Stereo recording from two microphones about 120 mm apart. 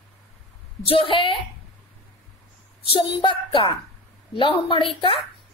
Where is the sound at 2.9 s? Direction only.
45° left (ahead or behind).